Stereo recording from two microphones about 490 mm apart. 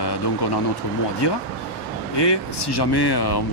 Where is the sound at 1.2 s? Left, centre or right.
Left.